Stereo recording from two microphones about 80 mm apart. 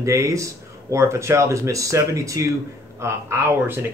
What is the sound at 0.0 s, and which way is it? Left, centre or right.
Speech, right.